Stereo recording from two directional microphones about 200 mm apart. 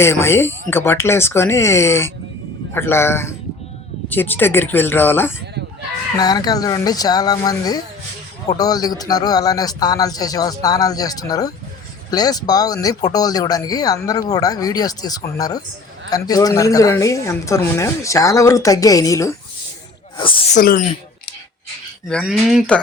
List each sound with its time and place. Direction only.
0.0 s a woman's voice: 10° left (ahead or behind)
20.6 s speech: 40° left (ahead or behind)
22.1 s speech: centre (ahead or behind)